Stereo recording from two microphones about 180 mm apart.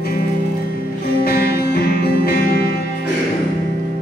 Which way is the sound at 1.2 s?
60° left (ahead or behind).